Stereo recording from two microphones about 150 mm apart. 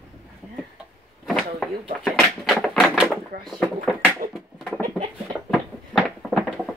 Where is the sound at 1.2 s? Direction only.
Centre (ahead or behind).